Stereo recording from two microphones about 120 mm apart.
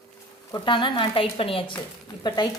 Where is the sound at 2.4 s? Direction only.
35° left (ahead or behind).